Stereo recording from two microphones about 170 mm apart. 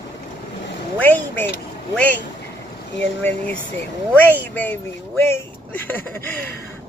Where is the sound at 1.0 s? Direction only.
10° left (ahead or behind).